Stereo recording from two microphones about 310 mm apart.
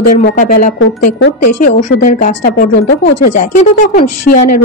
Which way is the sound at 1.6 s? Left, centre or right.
Left.